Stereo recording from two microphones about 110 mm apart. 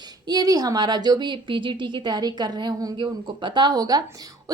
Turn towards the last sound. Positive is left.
turn(degrees=-35)  # may be behind; listen again after turning